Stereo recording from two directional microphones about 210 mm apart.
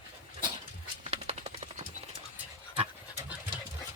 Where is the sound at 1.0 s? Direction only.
30° right (ahead or behind).